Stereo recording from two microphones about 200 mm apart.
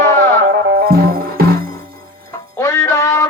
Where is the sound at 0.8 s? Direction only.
50° right (ahead or behind).